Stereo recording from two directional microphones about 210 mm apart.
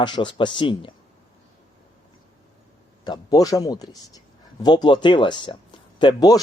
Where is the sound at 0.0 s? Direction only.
20° left (ahead or behind).